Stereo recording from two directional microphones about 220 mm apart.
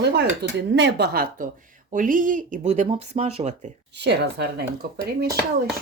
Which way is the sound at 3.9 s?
50° right (ahead or behind).